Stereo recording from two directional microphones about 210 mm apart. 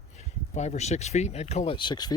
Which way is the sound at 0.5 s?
30° left (ahead or behind).